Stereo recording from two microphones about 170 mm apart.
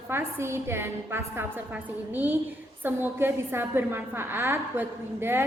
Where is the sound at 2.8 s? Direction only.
10° right (ahead or behind).